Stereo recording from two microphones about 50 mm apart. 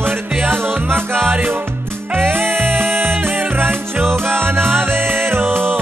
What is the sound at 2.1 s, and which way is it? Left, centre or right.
Music, right.